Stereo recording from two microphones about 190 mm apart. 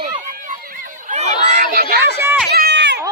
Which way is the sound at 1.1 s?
40° right (ahead or behind).